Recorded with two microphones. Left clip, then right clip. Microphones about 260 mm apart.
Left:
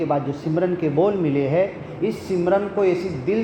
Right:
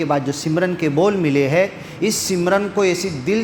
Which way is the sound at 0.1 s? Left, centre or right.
Right.